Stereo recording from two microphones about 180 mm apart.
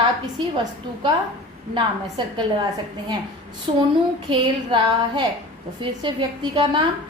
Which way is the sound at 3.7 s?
30° right (ahead or behind).